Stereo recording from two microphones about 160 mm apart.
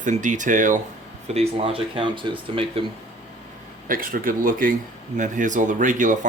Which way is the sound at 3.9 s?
60° right (ahead or behind).